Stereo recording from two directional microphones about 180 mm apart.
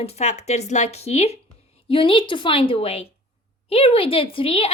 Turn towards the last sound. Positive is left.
turn(degrees=30)  # may be behind; listen again after turning